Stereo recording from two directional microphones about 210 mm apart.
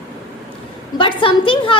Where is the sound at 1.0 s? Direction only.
25° left (ahead or behind).